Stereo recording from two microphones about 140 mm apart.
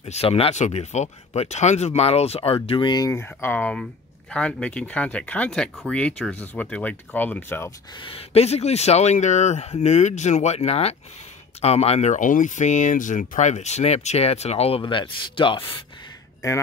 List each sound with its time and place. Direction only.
0.0 s speech: 45° left (ahead or behind); by 3.1 s 30° left (ahead or behind)
3.1 s speech: 15° left (ahead or behind)
8.0 s speech: 40° left (ahead or behind)